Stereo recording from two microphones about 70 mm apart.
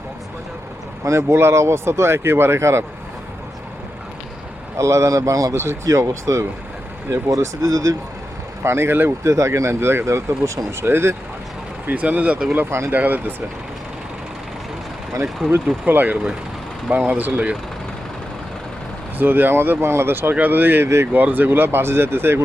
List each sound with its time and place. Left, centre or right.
1.0 s speech: right
4.8 s speech: right
8.6 s speech: right
9.2 s speech: right
11.9 s speech: right
15.9 s speech: right
19.2 s speech: right
21.1 s speech: right